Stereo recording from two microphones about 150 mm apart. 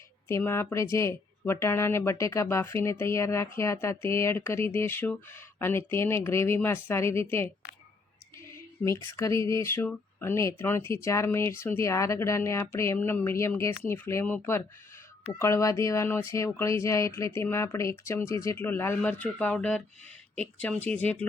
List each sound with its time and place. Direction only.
0.3 s speech: 15° left (ahead or behind)
8.8 s speech: 20° left (ahead or behind)